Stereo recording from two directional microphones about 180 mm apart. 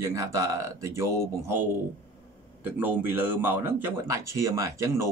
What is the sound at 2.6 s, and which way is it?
Speech, 10° right (ahead or behind).